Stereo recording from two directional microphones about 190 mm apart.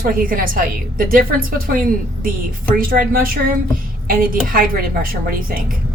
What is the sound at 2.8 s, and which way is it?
Speech, 50° right (ahead or behind).